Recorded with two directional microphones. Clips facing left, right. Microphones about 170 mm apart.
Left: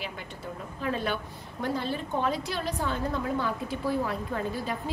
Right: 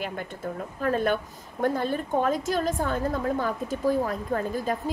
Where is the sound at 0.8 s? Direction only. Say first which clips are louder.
Right 6 dB; 45° right (ahead or behind).